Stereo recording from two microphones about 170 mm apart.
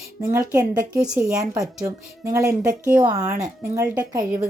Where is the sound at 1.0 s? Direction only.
5° right (ahead or behind).